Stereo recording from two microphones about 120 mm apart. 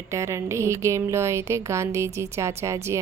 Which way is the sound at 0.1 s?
25° right (ahead or behind).